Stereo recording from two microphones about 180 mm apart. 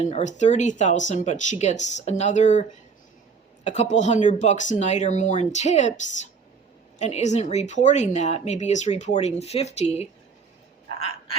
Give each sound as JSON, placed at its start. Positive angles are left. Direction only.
{"t": 0.0, "sound": "a woman's voice", "side_deg": 40}